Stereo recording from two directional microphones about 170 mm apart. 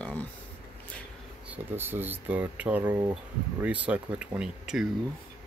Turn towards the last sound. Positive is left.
turn(degrees=-5)  # may be behind; listen again after turning